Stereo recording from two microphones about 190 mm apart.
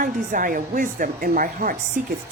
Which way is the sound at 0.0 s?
45° right (ahead or behind).